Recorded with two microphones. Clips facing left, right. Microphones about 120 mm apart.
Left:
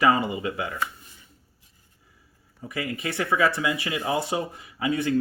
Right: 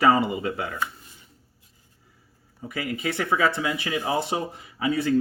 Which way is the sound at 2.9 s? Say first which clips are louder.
Right 1 dB; 25° right (ahead or behind).